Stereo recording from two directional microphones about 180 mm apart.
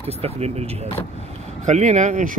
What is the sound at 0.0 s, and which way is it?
A man's voice, 35° right (ahead or behind).